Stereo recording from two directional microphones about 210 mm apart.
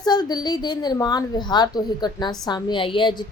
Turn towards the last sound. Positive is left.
turn(degrees=20)  # may be behind; listen again after turning